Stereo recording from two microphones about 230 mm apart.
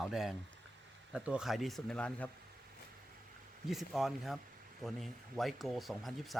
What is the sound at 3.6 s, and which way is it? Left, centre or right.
Speech, centre.